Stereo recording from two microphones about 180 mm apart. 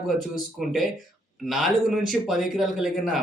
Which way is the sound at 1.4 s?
Centre (ahead or behind).